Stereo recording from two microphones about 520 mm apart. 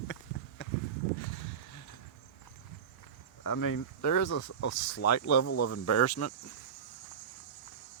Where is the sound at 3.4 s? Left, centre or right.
Left.